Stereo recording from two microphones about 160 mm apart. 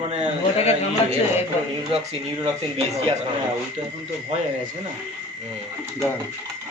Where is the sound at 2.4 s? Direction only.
40° right (ahead or behind).